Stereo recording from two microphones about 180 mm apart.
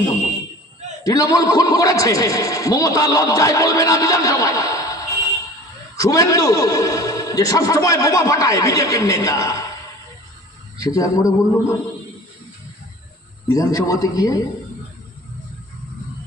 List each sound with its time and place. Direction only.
1.0 s a man's voice: 20° left (ahead or behind)
10.8 s a man's voice: 20° left (ahead or behind)
13.5 s a man's voice: 20° left (ahead or behind)